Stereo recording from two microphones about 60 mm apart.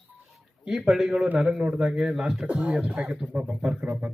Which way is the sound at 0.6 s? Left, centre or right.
Centre.